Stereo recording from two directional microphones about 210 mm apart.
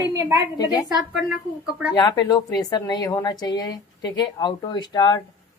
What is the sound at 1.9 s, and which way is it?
A woman's voice, 15° left (ahead or behind).